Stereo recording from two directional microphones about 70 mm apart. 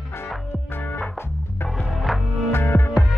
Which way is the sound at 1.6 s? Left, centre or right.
Centre.